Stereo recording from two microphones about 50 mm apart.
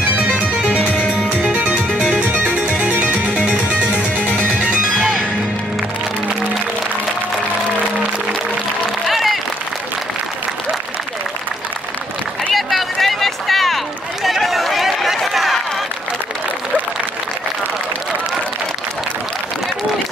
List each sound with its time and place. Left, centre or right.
0.1 s music: right
9.0 s applause: centre
12.5 s run: centre
15.3 s crowd: centre